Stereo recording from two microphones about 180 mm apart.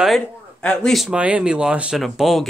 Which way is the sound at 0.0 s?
5° left (ahead or behind).